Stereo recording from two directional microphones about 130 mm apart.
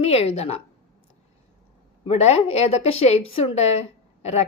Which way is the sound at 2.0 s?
50° left (ahead or behind).